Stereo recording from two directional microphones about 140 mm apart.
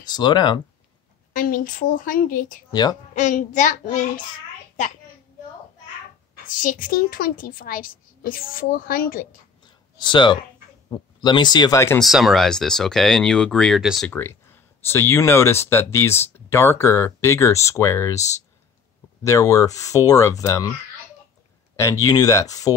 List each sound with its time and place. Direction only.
0.1 s speech: 30° left (ahead or behind)
1.3 s a woman's voice: 75° left (ahead or behind)
2.7 s speech: 30° left (ahead or behind)
3.2 s child singing: 60° left (ahead or behind)
6.4 s a woman's voice: 75° left (ahead or behind); by 9.3 s 90° left
9.7 s a sound: 35° left (ahead or behind)
10.9 s speech: 30° left (ahead or behind)
12.0 s speech: centre (ahead or behind)
14.1 s speech: 15° left (ahead or behind)
19.2 s speech: 20° left (ahead or behind)
21.7 s speech: 25° left (ahead or behind)